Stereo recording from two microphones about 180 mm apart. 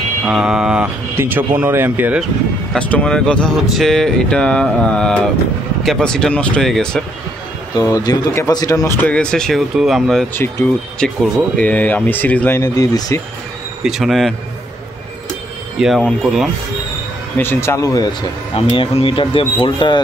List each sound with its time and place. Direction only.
0.2 s speech: 5° right (ahead or behind)
2.7 s speech: 5° left (ahead or behind)
7.7 s speech: 20° left (ahead or behind)
13.8 s speech: centre (ahead or behind)
15.8 s speech: centre (ahead or behind)
17.4 s speech: 15° left (ahead or behind)
18.7 s speech: 30° left (ahead or behind)